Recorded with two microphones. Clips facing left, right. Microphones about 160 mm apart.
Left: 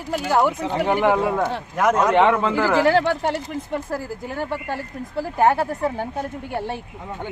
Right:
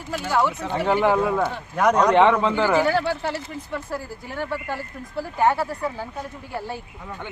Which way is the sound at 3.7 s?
45° left (ahead or behind).